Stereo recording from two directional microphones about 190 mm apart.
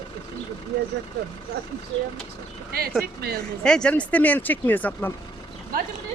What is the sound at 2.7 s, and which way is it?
Speech, 50° right (ahead or behind).